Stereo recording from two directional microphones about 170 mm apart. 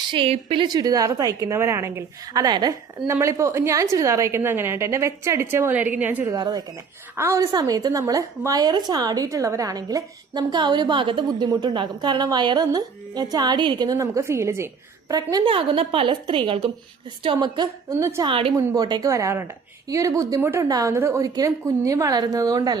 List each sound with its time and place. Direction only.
0.1 s a woman's voice: 35° right (ahead or behind)
18.5 s a woman's voice: 20° right (ahead or behind)